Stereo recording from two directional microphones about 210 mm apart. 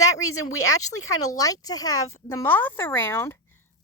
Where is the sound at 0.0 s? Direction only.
15° left (ahead or behind).